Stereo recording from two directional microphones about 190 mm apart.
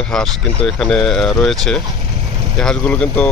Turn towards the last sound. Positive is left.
turn(degrees=5)  # may be behind; listen again after turning